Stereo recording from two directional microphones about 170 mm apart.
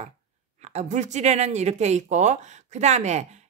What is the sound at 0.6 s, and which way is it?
A woman's voice, 40° right (ahead or behind).